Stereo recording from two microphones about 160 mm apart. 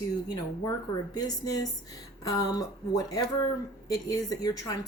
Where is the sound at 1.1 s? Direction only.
25° left (ahead or behind).